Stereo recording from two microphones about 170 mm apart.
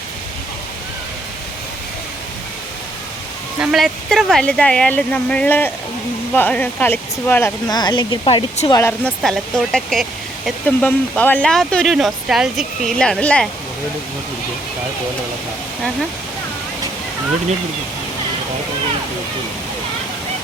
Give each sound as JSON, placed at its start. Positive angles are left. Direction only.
{"t": 3.6, "sound": "speech", "side_deg": -5}
{"t": 7.7, "sound": "speech", "side_deg": 25}
{"t": 8.7, "sound": "speech", "side_deg": 10}
{"t": 10.8, "sound": "speech", "side_deg": 10}